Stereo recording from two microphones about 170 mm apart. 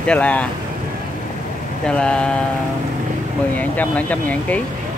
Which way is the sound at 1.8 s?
5° left (ahead or behind).